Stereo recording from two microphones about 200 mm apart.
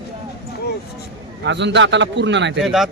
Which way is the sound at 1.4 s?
60° right (ahead or behind).